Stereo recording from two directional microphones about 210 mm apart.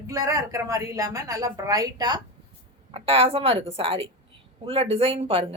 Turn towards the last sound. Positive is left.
turn(degrees=-25)  # may be behind; listen again after turning